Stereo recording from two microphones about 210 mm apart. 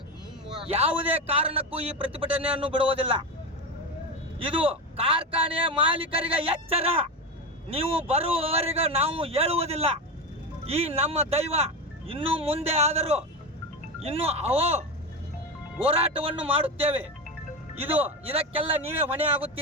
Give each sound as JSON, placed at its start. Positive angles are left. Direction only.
{"t": 0.6, "sound": "a man's voice", "side_deg": -30}
{"t": 4.4, "sound": "a man's voice", "side_deg": -25}
{"t": 15.9, "sound": "a man's voice", "side_deg": -25}
{"t": 18.3, "sound": "a man's voice", "side_deg": -25}